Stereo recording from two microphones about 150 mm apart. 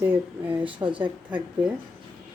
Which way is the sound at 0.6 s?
35° right (ahead or behind).